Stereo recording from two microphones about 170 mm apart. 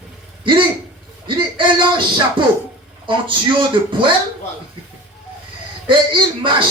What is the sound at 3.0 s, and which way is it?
A man's voice, 30° right (ahead or behind).